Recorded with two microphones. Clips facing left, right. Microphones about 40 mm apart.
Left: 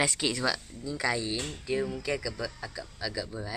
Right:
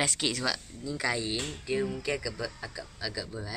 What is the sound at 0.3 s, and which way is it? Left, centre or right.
Speech, centre.